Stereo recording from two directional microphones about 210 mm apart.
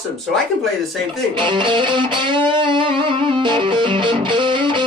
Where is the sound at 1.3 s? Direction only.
25° right (ahead or behind).